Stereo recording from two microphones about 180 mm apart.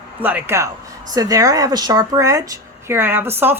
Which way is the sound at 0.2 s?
10° right (ahead or behind).